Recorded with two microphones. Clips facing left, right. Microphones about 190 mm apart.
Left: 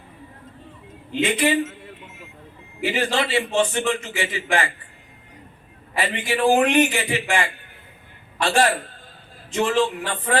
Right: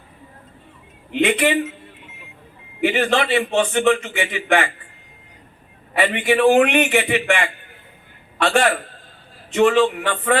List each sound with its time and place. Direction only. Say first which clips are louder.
1.1 s a man's voice: right 3 dB; 60° right (ahead or behind)
2.8 s a man's voice: right 4 dB; 60° right (ahead or behind)
5.9 s a man's voice: right 6 dB; 60° right (ahead or behind)